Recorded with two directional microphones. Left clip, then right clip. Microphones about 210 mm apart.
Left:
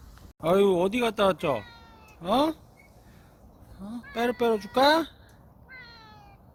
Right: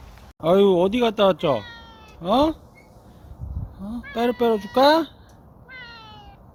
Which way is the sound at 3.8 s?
Centre (ahead or behind).